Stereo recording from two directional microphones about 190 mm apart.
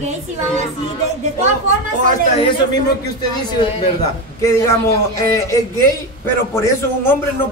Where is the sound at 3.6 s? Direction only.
25° left (ahead or behind).